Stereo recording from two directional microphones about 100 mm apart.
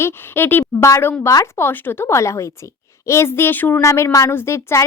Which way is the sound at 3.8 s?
30° left (ahead or behind).